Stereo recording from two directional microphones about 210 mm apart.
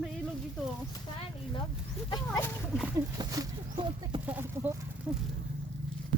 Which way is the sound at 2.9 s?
15° right (ahead or behind).